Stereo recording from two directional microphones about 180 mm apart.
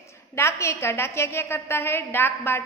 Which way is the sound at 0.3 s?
15° left (ahead or behind).